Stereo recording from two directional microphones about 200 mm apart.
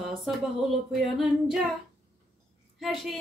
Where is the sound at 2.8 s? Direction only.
Centre (ahead or behind).